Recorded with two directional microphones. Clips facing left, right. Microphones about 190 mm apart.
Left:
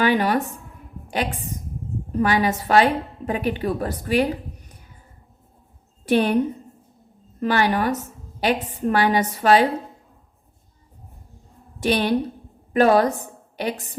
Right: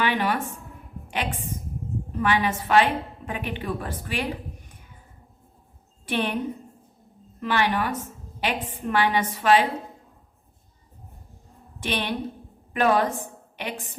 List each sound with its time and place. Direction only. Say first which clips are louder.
0.0 s a woman's voice: left 5 dB; 40° left (ahead or behind)
6.1 s a woman's voice: left 8 dB; 40° left (ahead or behind)
11.8 s a woman's voice: left 8 dB; 40° left (ahead or behind)